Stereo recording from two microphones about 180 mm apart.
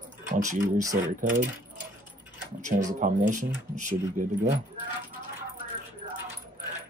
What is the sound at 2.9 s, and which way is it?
Speech, 45° right (ahead or behind).